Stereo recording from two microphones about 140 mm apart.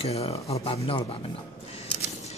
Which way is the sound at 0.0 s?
45° left (ahead or behind).